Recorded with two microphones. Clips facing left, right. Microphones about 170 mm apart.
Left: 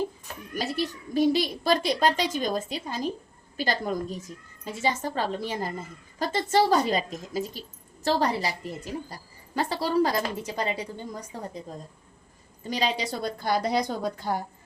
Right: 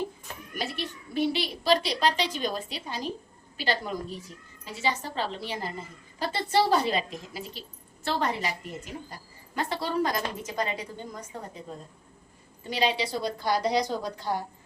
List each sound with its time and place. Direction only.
0.5 s a child's voice: 40° left (ahead or behind)
12.7 s a child's voice: 45° left (ahead or behind)